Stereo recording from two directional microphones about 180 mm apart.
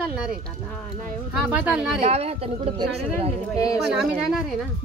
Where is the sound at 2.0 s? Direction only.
35° right (ahead or behind).